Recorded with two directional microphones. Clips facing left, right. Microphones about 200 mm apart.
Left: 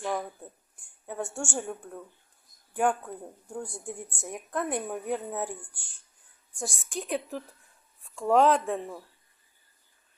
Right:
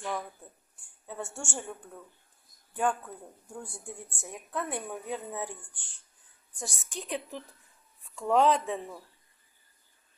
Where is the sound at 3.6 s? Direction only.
15° left (ahead or behind).